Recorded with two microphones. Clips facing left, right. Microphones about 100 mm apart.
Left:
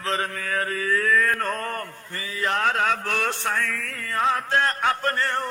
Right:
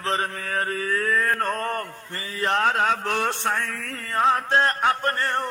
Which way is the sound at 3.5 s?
35° right (ahead or behind).